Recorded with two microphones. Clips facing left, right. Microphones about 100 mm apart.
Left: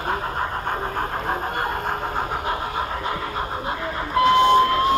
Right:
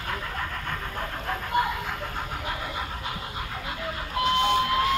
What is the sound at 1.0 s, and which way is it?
Honk, 50° left (ahead or behind).